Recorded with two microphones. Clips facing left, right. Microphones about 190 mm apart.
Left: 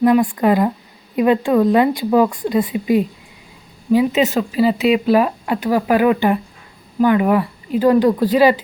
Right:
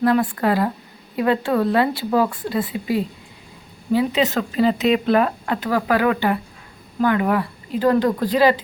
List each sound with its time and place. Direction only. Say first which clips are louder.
0.0 s speech: left 4 dB; 15° left (ahead or behind)
4.5 s speech: left 2 dB; 10° left (ahead or behind)